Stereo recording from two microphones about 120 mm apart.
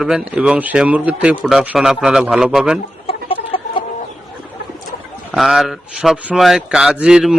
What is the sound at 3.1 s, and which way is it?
Chicken, 50° left (ahead or behind).